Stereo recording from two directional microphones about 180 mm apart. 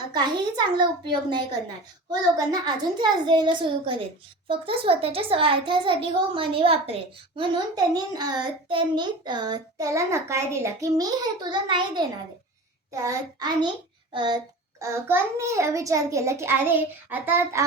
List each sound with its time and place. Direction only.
0.1 s a child's voice: 25° right (ahead or behind)